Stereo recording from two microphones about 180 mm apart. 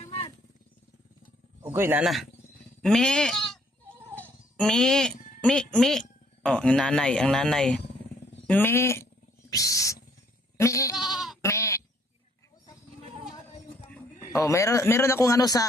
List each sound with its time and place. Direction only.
1.7 s a man's voice: 10° right (ahead or behind); by 10.9 s 15° left (ahead or behind)
10.9 s goat: centre (ahead or behind)
11.4 s goat: 15° left (ahead or behind)
14.3 s a man's voice: 15° left (ahead or behind)